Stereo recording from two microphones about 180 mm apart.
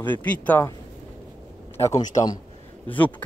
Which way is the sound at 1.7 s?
15° left (ahead or behind).